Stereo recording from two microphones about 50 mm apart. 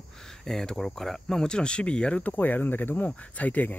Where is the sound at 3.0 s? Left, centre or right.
Left.